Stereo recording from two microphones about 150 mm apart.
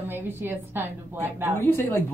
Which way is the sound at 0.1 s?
15° right (ahead or behind).